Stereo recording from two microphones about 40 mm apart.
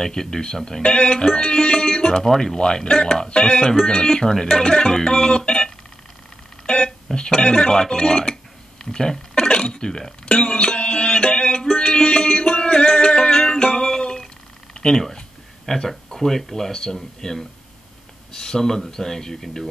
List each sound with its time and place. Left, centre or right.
0.0 s speech: centre
6.6 s a sound: left
7.2 s speech: centre
9.5 s music: left
12.8 s a sound: centre
15.6 s speech: centre